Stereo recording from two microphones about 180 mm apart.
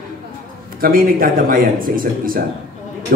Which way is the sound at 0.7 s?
55° right (ahead or behind).